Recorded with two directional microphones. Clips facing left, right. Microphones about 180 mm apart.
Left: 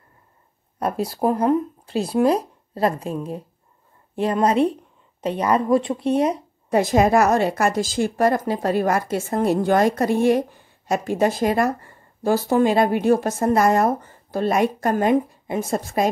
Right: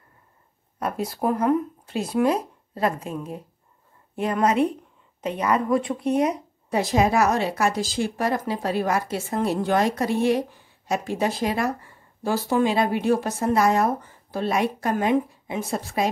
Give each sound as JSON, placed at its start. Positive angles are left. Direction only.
{"t": 0.7, "sound": "speech", "side_deg": 35}
{"t": 6.7, "sound": "speech", "side_deg": 50}